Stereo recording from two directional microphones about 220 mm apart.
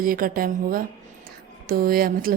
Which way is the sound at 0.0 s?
40° right (ahead or behind).